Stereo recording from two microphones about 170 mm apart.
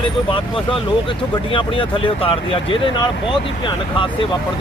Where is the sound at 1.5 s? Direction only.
30° left (ahead or behind).